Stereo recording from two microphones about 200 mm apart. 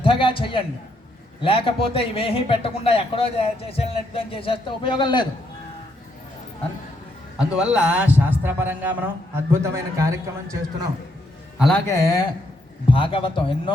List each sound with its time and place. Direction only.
0.0 s a man's voice: 25° left (ahead or behind)
7.3 s a man's voice: 5° right (ahead or behind)
11.5 s a man's voice: centre (ahead or behind)
11.9 s a man's voice: 15° left (ahead or behind)